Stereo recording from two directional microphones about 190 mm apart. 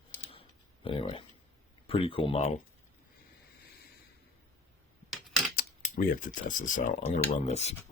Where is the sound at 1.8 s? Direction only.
30° left (ahead or behind).